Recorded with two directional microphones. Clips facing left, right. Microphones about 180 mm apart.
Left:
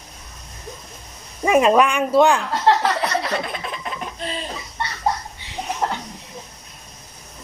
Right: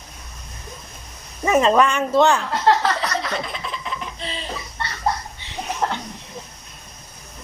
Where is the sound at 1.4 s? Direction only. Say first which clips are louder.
Left 1 dB; 10° left (ahead or behind).